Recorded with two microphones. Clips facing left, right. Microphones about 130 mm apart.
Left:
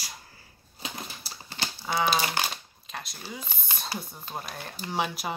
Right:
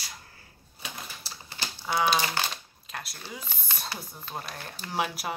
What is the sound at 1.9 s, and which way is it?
Speech, centre (ahead or behind).